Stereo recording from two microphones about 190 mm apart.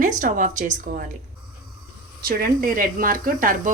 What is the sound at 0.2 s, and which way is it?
Speech, 45° right (ahead or behind).